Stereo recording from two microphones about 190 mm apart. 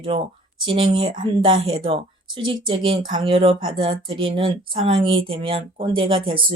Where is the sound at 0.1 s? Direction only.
25° right (ahead or behind).